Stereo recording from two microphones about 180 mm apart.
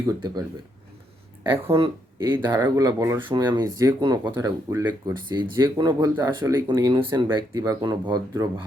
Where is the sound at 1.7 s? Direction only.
30° right (ahead or behind).